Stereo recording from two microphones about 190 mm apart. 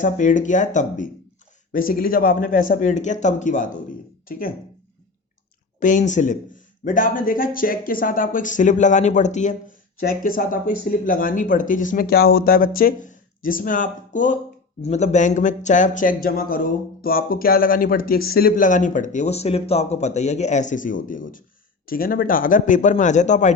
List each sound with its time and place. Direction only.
0.0 s speech: 40° left (ahead or behind)
5.8 s speech: 40° left (ahead or behind)
10.0 s speech: 50° left (ahead or behind)